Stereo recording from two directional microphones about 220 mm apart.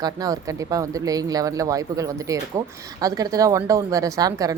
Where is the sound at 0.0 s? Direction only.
15° right (ahead or behind).